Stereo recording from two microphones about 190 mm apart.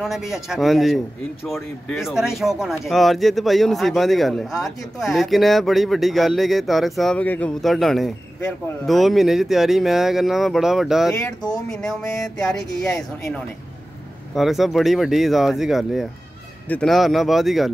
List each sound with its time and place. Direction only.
0.0 s speech: centre (ahead or behind)
11.1 s speech: 20° left (ahead or behind)
11.7 s speech: centre (ahead or behind)
14.3 s speech: centre (ahead or behind)